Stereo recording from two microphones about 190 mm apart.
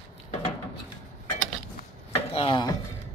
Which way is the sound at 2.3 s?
25° left (ahead or behind).